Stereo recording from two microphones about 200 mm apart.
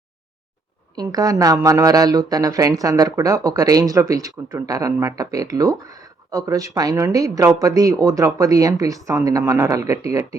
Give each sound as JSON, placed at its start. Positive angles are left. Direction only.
{"t": 0.9, "sound": "speech", "side_deg": -20}